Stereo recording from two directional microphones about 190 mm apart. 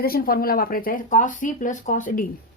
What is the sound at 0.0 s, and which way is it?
Speech, 50° left (ahead or behind).